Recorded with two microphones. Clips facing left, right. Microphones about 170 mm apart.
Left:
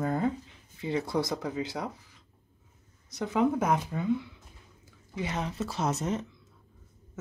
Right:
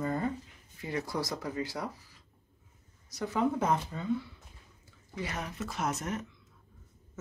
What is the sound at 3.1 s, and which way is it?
Speech, 20° left (ahead or behind).